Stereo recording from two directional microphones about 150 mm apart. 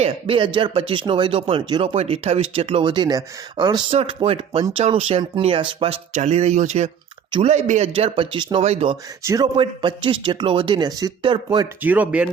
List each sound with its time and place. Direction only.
0.0 s speech: 35° right (ahead or behind)
6.1 s speech: 50° right (ahead or behind)
9.2 s a man's voice: 20° right (ahead or behind)
9.6 s a man's voice: 35° right (ahead or behind)
11.8 s speech: 10° right (ahead or behind)